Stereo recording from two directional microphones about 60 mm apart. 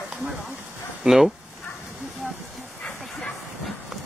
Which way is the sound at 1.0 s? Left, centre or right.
Centre.